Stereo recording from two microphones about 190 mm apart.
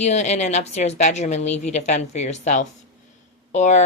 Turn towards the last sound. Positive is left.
turn(degrees=40)  # may be behind; listen again after turning